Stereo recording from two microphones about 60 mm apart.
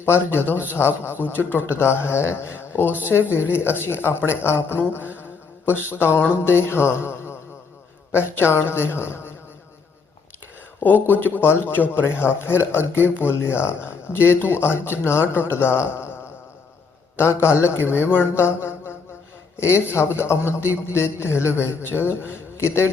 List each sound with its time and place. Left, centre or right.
0.0 s a man's voice: left
10.8 s a man's voice: left
17.2 s a man's voice: left